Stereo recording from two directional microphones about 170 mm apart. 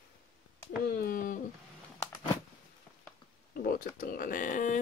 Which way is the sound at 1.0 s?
55° left (ahead or behind).